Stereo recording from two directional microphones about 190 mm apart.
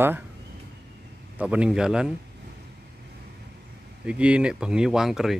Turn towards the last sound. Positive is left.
turn(degrees=0)  # may be behind; listen again after turning